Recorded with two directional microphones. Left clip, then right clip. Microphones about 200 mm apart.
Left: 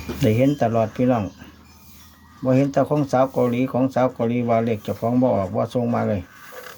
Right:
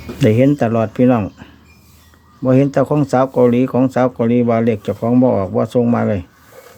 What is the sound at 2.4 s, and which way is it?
Speech, 45° right (ahead or behind).